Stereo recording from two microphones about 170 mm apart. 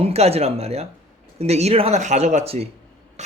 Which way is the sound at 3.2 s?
40° right (ahead or behind).